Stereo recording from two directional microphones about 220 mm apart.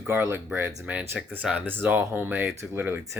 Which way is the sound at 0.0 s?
10° right (ahead or behind).